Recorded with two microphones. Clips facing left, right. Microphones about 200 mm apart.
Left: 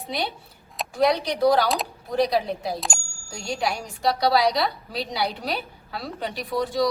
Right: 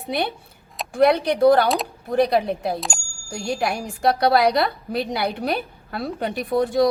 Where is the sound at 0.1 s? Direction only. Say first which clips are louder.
Right 5 dB; 55° right (ahead or behind).